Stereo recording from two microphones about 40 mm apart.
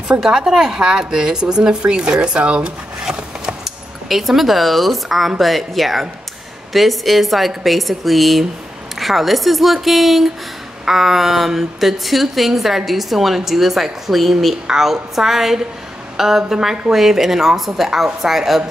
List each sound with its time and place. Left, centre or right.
0.5 s speech: centre; by 3.1 s right
3.1 s cutlery: centre
5.4 s a woman's voice: centre